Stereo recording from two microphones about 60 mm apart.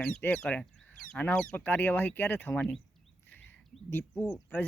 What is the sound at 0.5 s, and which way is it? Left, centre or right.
Speech, left.